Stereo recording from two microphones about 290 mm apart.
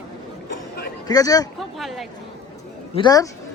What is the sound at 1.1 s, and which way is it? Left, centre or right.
Speech, centre.